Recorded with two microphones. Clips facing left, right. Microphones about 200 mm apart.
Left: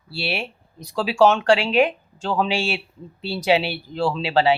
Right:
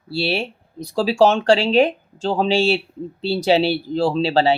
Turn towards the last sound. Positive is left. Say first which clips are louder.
# right 2 dB
turn(degrees=-35)  # may be behind; listen again after turning